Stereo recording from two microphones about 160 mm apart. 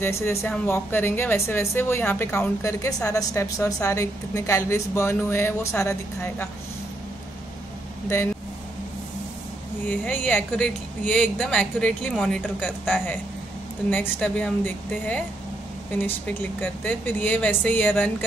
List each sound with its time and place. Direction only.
0.0 s a woman's voice: 15° left (ahead or behind)
9.8 s a woman's voice: 10° left (ahead or behind)